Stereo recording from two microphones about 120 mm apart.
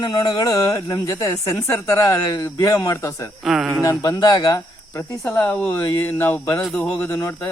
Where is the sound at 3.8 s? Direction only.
25° left (ahead or behind).